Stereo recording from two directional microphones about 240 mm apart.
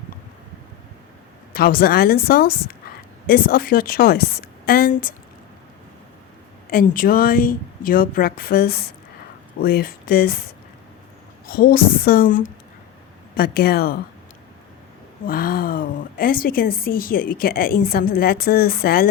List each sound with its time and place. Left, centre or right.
1.5 s a woman's voice: left
6.7 s a woman's voice: left
11.4 s a woman's voice: left
15.3 s a woman's voice: left